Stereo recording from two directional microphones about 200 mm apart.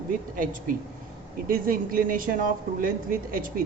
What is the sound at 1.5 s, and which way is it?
A woman's voice, 45° right (ahead or behind).